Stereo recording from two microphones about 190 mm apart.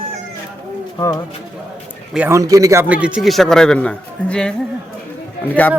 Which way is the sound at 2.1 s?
10° right (ahead or behind).